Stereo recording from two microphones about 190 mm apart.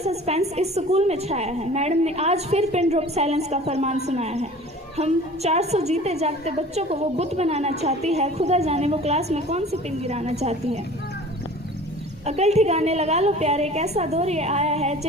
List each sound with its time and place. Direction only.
0.0 s a woman's voice: 35° right (ahead or behind)
12.2 s a woman's voice: 35° right (ahead or behind)